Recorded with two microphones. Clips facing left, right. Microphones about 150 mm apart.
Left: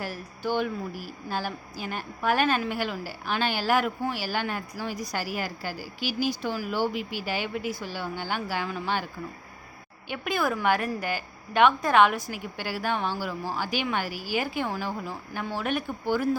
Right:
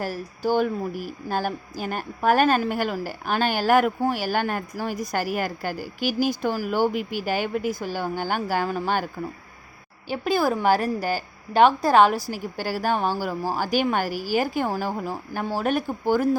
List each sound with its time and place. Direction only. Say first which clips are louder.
0.0 s a woman's voice: right 6 dB; 40° right (ahead or behind)
10.1 s a woman's voice: right 5 dB; 35° right (ahead or behind)